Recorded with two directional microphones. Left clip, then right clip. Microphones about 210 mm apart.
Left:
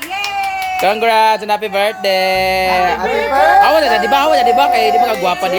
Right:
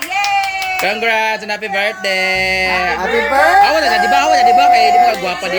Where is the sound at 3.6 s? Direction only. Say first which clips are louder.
Left 1 dB; 10° left (ahead or behind).